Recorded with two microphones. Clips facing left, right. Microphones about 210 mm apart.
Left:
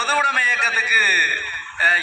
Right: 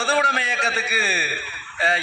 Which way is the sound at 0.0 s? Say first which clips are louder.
Right 4 dB; 50° right (ahead or behind).